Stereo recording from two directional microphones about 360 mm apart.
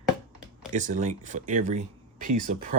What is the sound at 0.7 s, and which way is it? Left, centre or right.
Speech, right.